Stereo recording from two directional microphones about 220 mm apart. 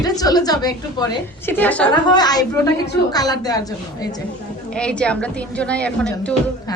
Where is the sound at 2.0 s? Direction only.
20° left (ahead or behind).